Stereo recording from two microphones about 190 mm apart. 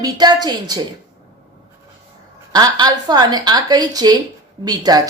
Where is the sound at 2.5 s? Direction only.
20° right (ahead or behind).